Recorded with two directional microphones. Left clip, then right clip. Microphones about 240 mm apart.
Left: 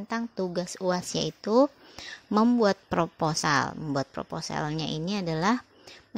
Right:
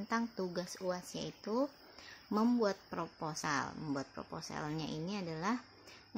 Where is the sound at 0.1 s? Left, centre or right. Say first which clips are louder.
Left 7 dB; left.